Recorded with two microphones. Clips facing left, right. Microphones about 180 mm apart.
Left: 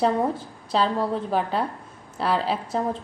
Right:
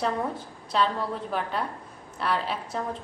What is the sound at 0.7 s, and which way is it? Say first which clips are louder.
A woman's voice: left 4 dB; 30° left (ahead or behind).